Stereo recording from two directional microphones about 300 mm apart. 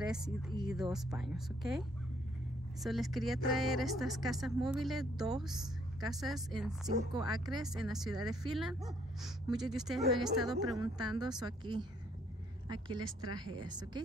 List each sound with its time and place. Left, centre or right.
0.0 s speech: centre
6.9 s a woman's voice: right
7.2 s speech: centre
10.8 s speech: centre